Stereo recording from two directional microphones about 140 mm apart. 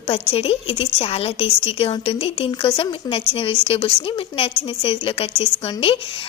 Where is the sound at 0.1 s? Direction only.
45° left (ahead or behind).